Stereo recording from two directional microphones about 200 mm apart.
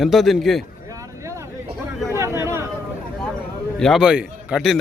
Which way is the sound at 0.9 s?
15° right (ahead or behind).